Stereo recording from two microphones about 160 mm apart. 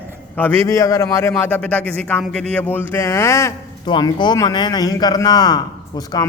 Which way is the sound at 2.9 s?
15° left (ahead or behind).